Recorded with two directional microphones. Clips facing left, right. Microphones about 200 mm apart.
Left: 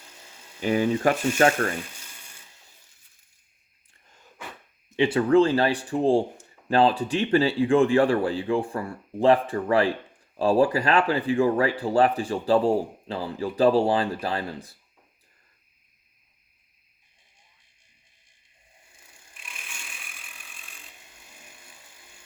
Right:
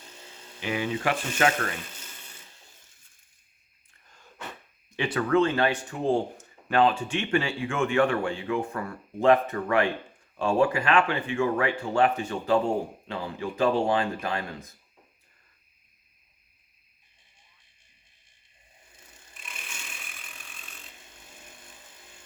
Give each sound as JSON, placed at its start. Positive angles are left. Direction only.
{"t": 0.6, "sound": "speech", "side_deg": 40}
{"t": 4.9, "sound": "speech", "side_deg": 25}